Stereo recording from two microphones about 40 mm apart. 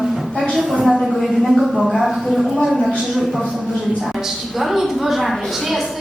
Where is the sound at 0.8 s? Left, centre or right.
Centre.